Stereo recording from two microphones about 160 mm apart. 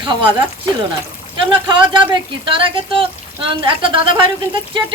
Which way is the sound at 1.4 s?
30° right (ahead or behind).